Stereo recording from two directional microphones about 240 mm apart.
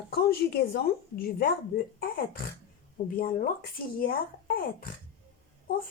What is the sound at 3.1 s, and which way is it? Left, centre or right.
A woman's voice, left.